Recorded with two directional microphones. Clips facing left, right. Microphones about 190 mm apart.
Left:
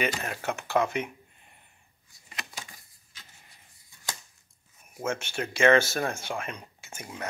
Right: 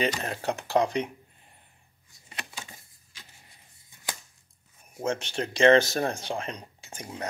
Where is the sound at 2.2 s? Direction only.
25° right (ahead or behind).